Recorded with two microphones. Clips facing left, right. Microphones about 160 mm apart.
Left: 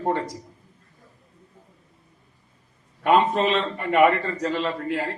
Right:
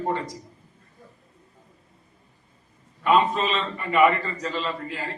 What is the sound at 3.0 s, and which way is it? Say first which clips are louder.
A man's voice: left 2 dB; 65° left (ahead or behind).